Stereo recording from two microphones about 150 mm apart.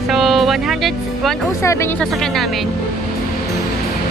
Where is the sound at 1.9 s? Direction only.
5° left (ahead or behind).